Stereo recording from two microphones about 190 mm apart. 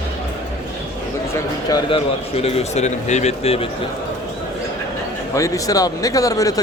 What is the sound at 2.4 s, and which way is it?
A man's voice, 30° left (ahead or behind).